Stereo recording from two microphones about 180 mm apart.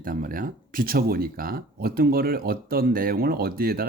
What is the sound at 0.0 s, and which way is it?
Speech, 50° right (ahead or behind).